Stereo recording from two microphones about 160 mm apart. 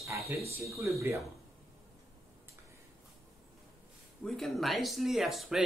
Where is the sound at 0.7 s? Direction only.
20° right (ahead or behind).